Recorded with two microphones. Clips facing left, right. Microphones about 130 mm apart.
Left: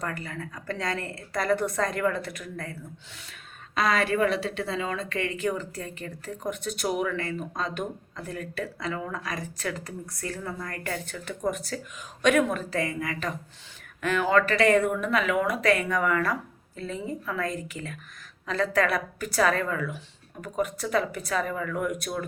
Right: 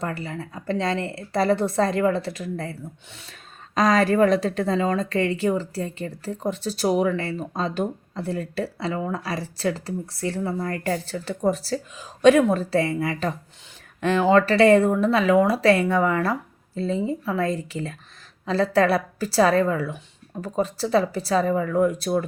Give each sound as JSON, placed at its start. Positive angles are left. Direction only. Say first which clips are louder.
{"t": 0.0, "sound": "a woman's voice", "louder": "right 4 dB", "side_deg": -30}
{"t": 3.8, "sound": "a woman's voice", "louder": "right 6 dB", "side_deg": -40}